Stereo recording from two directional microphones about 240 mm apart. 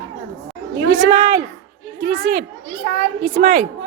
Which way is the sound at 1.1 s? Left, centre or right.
Right.